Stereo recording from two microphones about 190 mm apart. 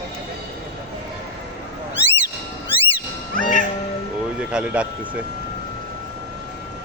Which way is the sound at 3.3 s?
45° left (ahead or behind).